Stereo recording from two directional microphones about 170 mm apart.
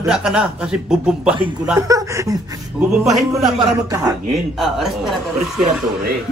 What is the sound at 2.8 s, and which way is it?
Speech, 5° right (ahead or behind).